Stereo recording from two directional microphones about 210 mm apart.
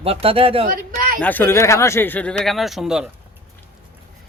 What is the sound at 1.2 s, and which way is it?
Speech, 10° left (ahead or behind).